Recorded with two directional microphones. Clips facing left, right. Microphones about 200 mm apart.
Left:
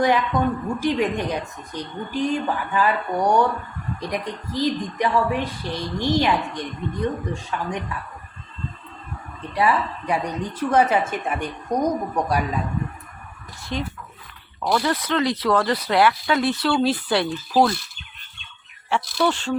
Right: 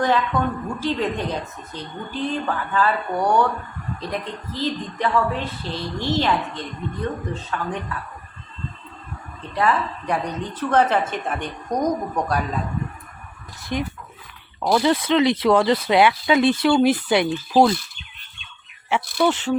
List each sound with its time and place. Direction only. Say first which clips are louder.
0.0 s a woman's voice: left 1 dB; 15° left (ahead or behind)
9.6 s a woman's voice: even; 10° left (ahead or behind)
13.7 s speech: right 2 dB; 15° right (ahead or behind)
14.9 s speech: right 4 dB; 25° right (ahead or behind)
19.2 s speech: right 2 dB; 15° right (ahead or behind)